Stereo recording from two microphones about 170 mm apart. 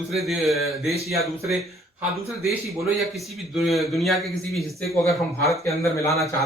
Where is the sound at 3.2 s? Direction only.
Centre (ahead or behind).